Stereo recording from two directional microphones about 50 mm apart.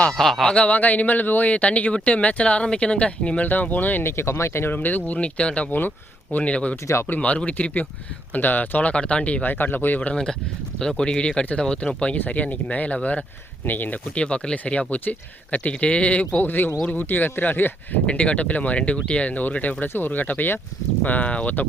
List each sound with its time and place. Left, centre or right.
0.1 s speech: centre
0.4 s speech: left
4.0 s speech: left
4.7 s speech: left
8.9 s speech: left
10.8 s speech: centre
12.1 s speech: left
13.7 s speech: left
14.2 s speech: left
16.4 s speech: left
18.0 s speech: left